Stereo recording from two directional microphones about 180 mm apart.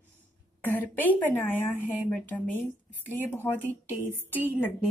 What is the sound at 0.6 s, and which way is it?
A woman's voice, 10° left (ahead or behind).